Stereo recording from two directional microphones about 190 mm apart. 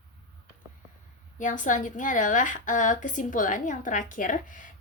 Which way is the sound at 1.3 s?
40° left (ahead or behind).